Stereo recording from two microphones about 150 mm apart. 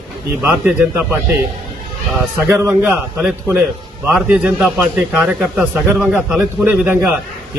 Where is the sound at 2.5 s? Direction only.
15° right (ahead or behind).